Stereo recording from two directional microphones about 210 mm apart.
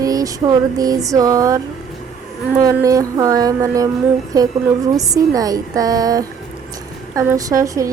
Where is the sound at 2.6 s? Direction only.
15° right (ahead or behind).